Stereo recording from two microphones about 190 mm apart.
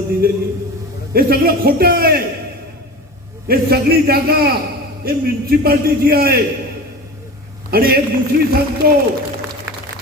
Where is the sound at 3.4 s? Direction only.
50° right (ahead or behind).